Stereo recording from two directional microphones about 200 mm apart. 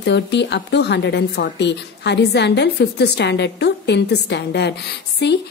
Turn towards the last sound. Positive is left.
turn(degrees=60)  # may be behind; listen again after turning